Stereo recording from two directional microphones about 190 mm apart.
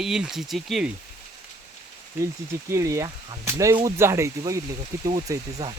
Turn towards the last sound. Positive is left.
turn(degrees=-20)  # may be behind; listen again after turning